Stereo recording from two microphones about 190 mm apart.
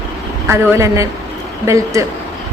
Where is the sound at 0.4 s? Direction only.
15° right (ahead or behind).